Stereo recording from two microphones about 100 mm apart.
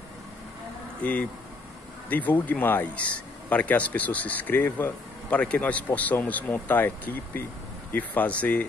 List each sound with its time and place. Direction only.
2.0 s speech: 15° left (ahead or behind)